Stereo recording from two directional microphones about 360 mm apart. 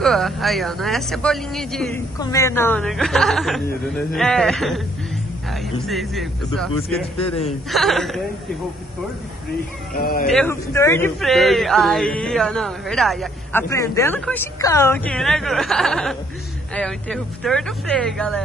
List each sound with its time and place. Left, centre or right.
0.0 s speech: centre
9.9 s speech: left
10.2 s speech: centre